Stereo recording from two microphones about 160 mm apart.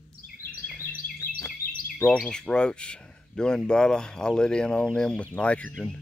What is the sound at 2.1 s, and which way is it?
Speech, 5° left (ahead or behind).